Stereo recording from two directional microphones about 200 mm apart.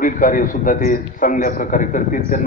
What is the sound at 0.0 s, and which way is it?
A man's voice, 40° left (ahead or behind).